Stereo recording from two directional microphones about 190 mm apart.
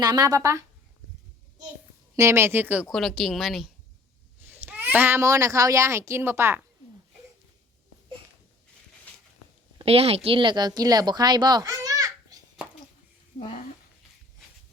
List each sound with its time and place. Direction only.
0.0 s a woman's voice: 20° right (ahead or behind)
2.1 s a child's voice: 15° right (ahead or behind)
9.7 s speech: 30° right (ahead or behind)